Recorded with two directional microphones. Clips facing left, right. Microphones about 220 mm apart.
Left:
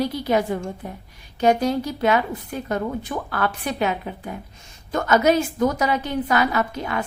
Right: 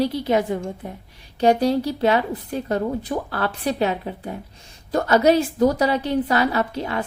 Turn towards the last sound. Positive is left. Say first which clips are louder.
# right 1 dB
turn(degrees=-30)  # may be behind; listen again after turning